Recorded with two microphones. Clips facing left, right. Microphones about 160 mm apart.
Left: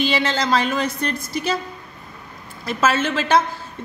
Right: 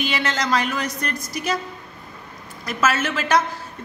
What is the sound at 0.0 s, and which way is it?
A woman's voice, 30° left (ahead or behind).